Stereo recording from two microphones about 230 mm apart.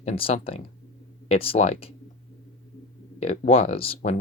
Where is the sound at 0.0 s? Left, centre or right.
Left.